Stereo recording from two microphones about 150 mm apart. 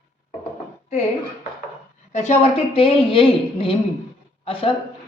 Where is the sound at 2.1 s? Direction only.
50° left (ahead or behind).